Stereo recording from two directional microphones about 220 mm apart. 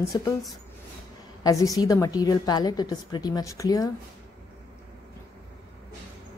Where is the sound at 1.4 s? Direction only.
15° left (ahead or behind).